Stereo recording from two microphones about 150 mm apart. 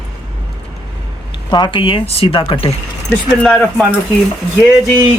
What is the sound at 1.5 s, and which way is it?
Speech, 30° left (ahead or behind).